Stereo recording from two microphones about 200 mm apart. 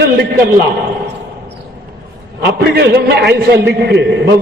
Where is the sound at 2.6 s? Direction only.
55° right (ahead or behind).